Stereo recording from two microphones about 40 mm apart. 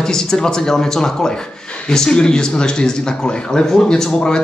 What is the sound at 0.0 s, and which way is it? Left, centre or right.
Speech, centre.